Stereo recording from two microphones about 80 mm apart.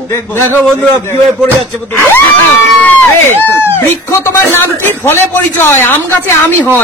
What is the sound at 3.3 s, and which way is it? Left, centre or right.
Speech, left.